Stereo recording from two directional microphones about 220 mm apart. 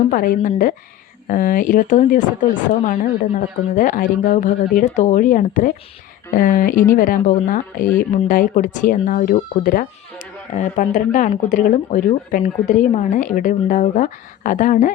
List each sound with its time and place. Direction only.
0.1 s speech: 40° left (ahead or behind)